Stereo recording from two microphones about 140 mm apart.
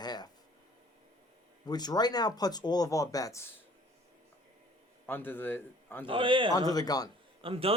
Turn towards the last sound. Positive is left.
turn(degrees=-40)  # may be behind; listen again after turning